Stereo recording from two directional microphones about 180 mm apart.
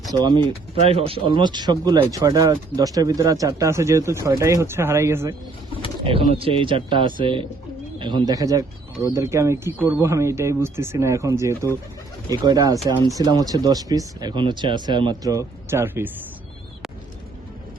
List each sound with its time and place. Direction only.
0.1 s speech: 25° right (ahead or behind)
6.0 s speech: 30° right (ahead or behind); by 16.1 s 15° right (ahead or behind)